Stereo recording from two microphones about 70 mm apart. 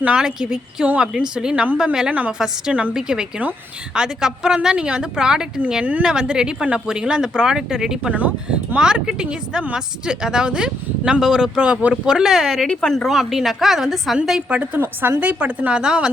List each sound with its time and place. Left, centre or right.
0.0 s speech: centre
8.1 s a woman's voice: right; by 13.1 s centre
13.1 s speech: centre
14.5 s a woman's voice: centre